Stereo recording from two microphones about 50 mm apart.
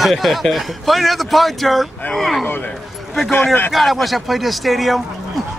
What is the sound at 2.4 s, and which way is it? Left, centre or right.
Speech, left.